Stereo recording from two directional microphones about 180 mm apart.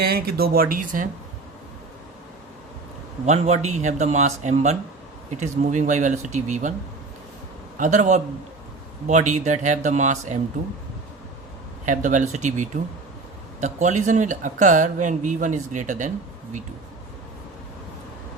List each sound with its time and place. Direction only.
0.0 s speech: 60° right (ahead or behind)
3.2 s speech: 35° right (ahead or behind)
7.8 s speech: 40° right (ahead or behind)
11.9 s speech: 45° right (ahead or behind)